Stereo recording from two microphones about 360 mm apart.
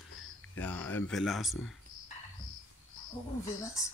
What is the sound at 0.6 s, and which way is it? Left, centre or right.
Speech, centre.